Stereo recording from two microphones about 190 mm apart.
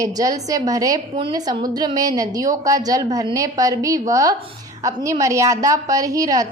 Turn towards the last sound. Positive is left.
turn(degrees=-20)  # may be behind; listen again after turning